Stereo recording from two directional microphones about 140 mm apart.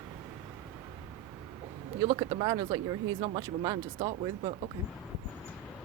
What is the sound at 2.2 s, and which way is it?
Speech, 35° right (ahead or behind).